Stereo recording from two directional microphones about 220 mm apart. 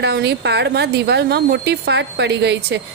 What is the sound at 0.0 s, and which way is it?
A woman's voice, 50° right (ahead or behind).